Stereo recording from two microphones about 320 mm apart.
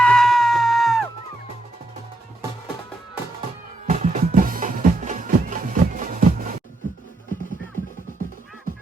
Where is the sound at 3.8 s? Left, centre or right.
Right.